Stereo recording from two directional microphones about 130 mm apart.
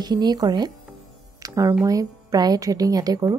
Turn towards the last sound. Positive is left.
turn(degrees=-30)  # may be behind; listen again after turning